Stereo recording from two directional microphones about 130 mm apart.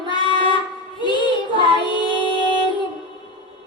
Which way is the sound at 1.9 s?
40° left (ahead or behind).